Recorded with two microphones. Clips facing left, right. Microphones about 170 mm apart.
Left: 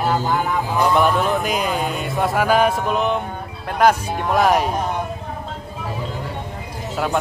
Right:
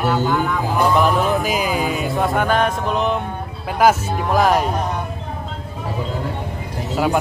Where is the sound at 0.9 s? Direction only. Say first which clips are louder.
Even; centre (ahead or behind).